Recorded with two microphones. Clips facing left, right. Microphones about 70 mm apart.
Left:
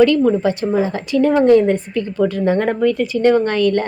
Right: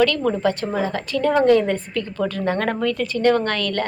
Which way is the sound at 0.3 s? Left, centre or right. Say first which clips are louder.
Left 5 dB; centre.